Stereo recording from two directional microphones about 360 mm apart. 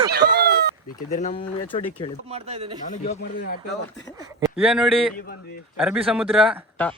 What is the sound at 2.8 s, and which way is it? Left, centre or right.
Speech, centre.